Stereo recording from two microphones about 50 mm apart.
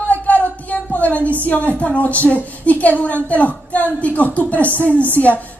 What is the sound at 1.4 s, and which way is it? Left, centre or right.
Speech, left.